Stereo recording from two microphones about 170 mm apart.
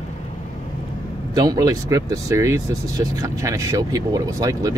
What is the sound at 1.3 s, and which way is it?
Speech, 20° right (ahead or behind).